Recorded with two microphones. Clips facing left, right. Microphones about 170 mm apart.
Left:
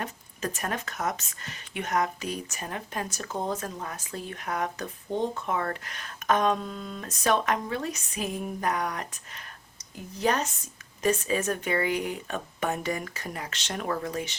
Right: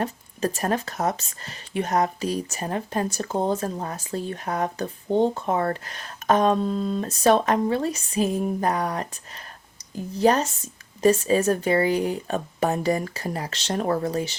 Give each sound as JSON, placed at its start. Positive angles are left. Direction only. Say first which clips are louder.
{"t": 0.0, "sound": "speech", "louder": "right 7 dB", "side_deg": -30}